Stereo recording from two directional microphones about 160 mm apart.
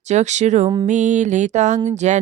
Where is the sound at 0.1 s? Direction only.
45° right (ahead or behind).